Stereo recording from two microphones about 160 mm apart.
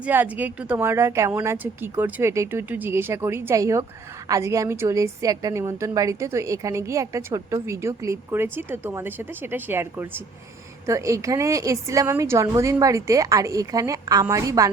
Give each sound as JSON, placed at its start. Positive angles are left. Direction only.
{"t": 0.0, "sound": "a woman's voice", "side_deg": -10}